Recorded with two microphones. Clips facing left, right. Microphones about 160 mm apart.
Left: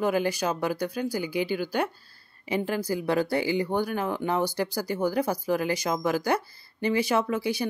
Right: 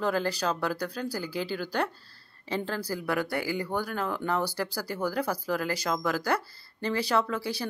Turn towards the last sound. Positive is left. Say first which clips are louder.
# left 4 dB
turn(degrees=15)  # may be behind; listen again after turning